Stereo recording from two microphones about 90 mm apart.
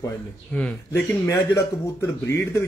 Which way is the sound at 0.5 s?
15° left (ahead or behind).